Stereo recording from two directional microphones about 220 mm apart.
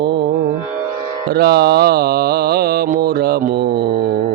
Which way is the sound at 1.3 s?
45° right (ahead or behind).